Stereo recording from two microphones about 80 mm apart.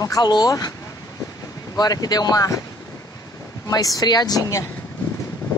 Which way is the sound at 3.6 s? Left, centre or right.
Left.